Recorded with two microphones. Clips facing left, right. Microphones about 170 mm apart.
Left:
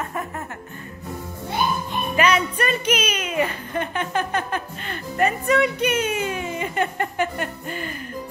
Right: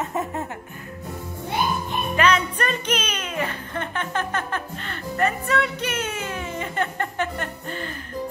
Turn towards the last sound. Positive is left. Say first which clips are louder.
# left 2 dB
turn(degrees=10)  # may be behind; listen again after turning